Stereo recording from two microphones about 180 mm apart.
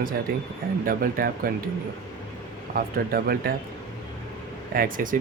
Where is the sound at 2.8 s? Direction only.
55° right (ahead or behind).